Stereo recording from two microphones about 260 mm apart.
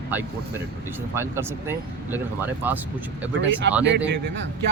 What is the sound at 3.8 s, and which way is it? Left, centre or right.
Speech, right.